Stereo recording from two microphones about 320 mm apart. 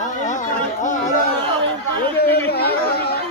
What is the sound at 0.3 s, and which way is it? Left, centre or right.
Music, left.